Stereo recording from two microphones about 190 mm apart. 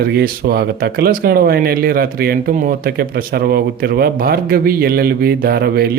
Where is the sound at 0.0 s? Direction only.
55° right (ahead or behind).